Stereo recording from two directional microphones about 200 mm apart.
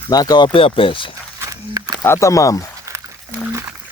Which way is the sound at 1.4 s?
15° right (ahead or behind).